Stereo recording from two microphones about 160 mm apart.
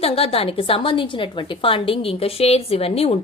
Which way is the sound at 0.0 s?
35° left (ahead or behind).